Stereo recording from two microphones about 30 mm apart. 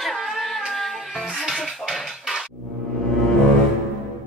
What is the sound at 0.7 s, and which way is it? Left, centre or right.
Music, centre.